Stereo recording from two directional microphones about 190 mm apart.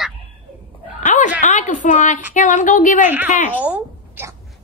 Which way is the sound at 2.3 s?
45° left (ahead or behind).